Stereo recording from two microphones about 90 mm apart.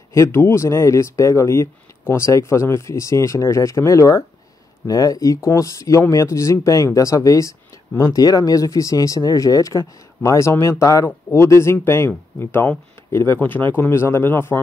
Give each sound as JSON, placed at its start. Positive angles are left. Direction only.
{"t": 0.1, "sound": "speech", "side_deg": 30}
{"t": 8.1, "sound": "speech", "side_deg": 45}
{"t": 11.1, "sound": "speech", "side_deg": 20}
{"t": 11.4, "sound": "speech", "side_deg": 30}